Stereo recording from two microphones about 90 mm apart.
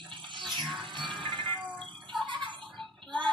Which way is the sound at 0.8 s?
60° right (ahead or behind).